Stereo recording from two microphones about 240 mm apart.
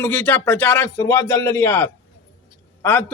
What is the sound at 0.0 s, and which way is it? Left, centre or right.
A man's voice, centre.